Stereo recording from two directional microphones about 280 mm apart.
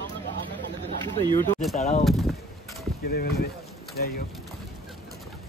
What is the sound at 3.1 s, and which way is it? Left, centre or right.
Speech, left.